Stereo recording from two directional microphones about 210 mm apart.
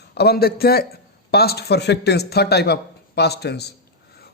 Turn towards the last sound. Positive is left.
turn(degrees=50)  # may be behind; listen again after turning